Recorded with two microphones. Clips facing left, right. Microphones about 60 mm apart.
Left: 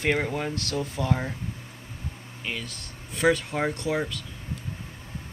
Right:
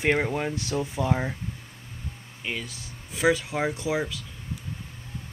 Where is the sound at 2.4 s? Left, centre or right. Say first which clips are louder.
Right 1 dB; centre.